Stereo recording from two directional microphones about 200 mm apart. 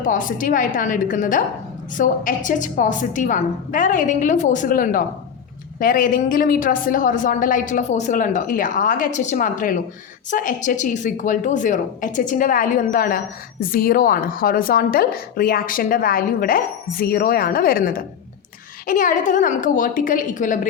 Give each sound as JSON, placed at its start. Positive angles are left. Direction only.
{"t": 0.0, "sound": "a woman's voice", "side_deg": 40}